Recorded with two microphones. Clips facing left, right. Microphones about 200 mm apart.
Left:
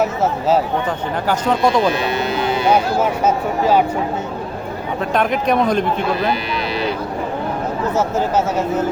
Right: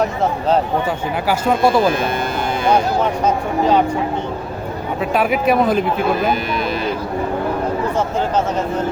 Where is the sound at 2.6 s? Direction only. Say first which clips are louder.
Right 1 dB; 5° left (ahead or behind).